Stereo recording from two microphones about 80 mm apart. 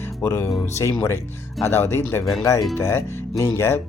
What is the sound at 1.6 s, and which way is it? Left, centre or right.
Speech, left.